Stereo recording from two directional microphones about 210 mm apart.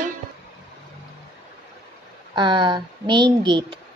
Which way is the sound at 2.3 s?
20° right (ahead or behind).